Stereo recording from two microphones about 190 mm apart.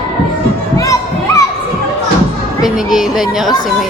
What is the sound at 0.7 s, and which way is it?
Crowd, 15° left (ahead or behind).